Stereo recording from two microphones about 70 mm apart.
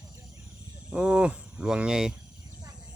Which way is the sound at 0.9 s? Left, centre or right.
Centre.